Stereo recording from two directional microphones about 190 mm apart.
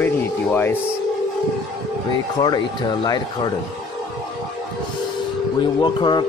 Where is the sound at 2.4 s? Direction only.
25° left (ahead or behind).